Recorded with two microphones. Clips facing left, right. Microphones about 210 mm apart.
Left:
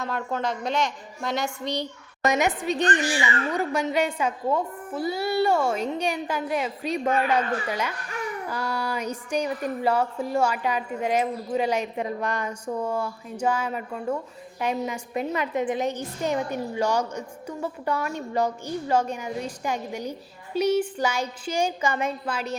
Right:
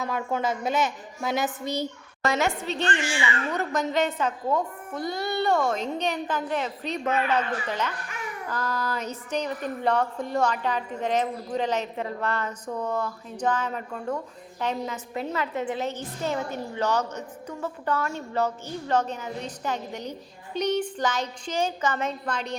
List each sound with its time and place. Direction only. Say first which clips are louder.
0.0 s a woman's voice: right 1 dB; 5° right (ahead or behind)
2.2 s a woman's voice: left 2 dB; 15° left (ahead or behind)
3.0 s speech: left 2 dB; 35° left (ahead or behind)
3.5 s a woman's voice: left 1 dB; 10° left (ahead or behind)